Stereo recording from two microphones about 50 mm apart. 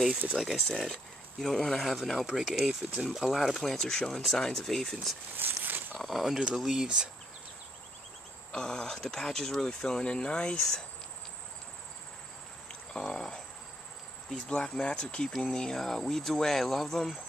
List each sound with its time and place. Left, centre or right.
0.7 s speech: centre
5.4 s a sound: right
5.9 s speech: centre
6.4 s speech: centre
8.5 s speech: centre
12.9 s speech: centre